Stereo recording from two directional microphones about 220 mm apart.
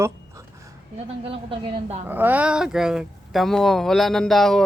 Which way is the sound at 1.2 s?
25° right (ahead or behind).